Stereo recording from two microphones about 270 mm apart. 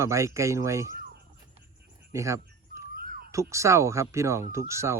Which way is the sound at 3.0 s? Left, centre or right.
Right.